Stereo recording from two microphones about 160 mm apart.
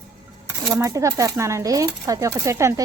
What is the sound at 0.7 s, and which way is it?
Speech, 20° right (ahead or behind).